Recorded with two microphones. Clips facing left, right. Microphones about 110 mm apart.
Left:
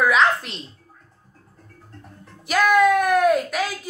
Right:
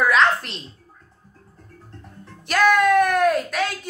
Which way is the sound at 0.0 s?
Centre (ahead or behind).